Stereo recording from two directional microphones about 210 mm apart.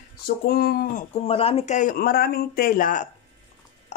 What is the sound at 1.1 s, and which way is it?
Speech, 30° left (ahead or behind).